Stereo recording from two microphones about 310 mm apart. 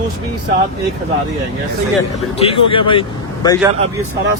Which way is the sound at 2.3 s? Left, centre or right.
Centre.